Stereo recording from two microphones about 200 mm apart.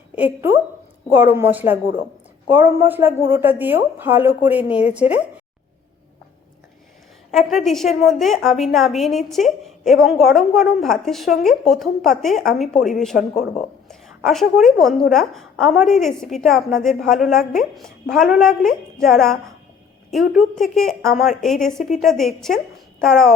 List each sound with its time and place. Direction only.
0.2 s a woman's voice: 10° right (ahead or behind)
7.3 s a woman's voice: centre (ahead or behind)
13.3 s speech: 35° left (ahead or behind)
13.8 s a woman's voice: centre (ahead or behind)